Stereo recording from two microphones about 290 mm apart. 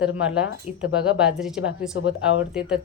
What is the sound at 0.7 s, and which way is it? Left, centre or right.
Speech, left.